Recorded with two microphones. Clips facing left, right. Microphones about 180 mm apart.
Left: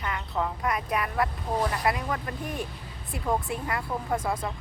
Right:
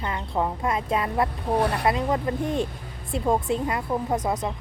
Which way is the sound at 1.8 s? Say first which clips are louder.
Right 5 dB; 25° right (ahead or behind).